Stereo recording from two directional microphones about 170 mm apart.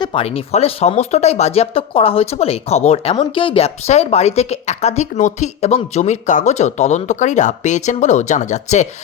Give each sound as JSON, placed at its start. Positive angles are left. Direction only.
{"t": 0.0, "sound": "speech", "side_deg": 35}